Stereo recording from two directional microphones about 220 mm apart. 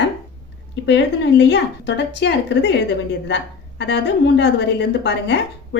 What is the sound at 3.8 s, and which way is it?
A woman's voice, 55° left (ahead or behind).